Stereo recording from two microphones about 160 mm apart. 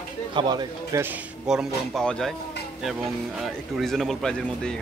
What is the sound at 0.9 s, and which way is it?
Speech, 20° right (ahead or behind).